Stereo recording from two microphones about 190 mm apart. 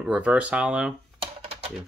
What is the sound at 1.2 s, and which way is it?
Typing, 30° right (ahead or behind).